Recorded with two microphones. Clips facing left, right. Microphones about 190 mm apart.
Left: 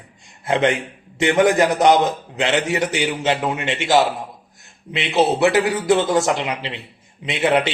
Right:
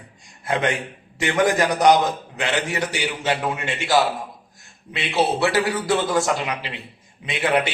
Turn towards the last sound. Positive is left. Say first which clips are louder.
# left 3 dB
turn(degrees=25)  # may be behind; listen again after turning